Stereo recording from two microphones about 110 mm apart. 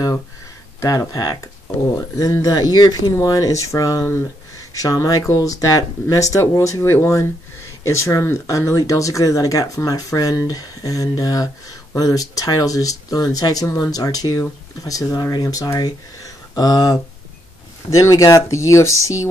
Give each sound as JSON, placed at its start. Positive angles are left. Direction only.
{"t": 0.7, "sound": "speech", "side_deg": 35}